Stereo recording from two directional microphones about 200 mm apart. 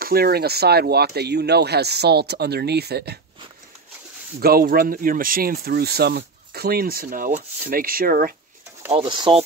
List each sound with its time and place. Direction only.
0.0 s speech: 50° right (ahead or behind)
4.4 s speech: 50° right (ahead or behind)
8.9 s speech: 25° right (ahead or behind)